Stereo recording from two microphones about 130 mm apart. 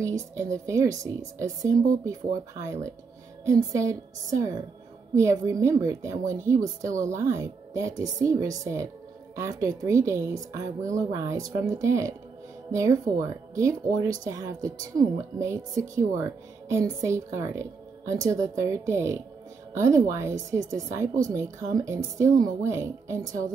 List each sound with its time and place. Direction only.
0.0 s a woman's voice: 25° right (ahead or behind)